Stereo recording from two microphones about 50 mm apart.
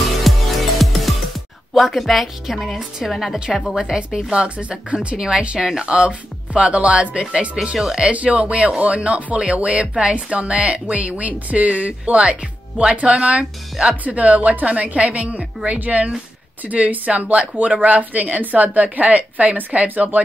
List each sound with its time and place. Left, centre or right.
0.2 s music: centre
3.1 s a woman's voice: centre
3.5 s speech: centre
7.7 s speech: centre
8.1 s a woman's voice: right